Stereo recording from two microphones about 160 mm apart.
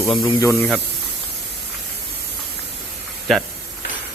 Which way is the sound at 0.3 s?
20° left (ahead or behind).